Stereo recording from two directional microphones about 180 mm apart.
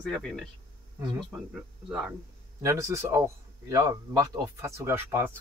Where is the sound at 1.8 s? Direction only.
Centre (ahead or behind).